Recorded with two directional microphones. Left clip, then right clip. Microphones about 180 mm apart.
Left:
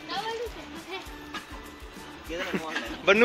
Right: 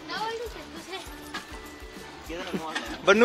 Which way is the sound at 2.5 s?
5° right (ahead or behind).